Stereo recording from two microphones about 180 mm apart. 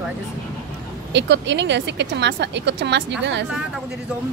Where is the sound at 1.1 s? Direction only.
75° right (ahead or behind).